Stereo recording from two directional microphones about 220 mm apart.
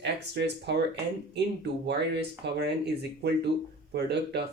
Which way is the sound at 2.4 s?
50° right (ahead or behind).